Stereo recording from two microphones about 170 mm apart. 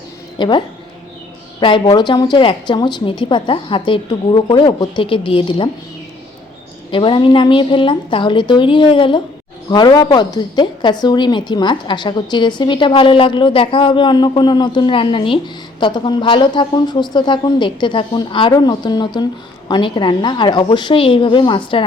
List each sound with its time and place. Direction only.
0.3 s a woman's voice: 25° left (ahead or behind)
6.9 s a woman's voice: 30° left (ahead or behind)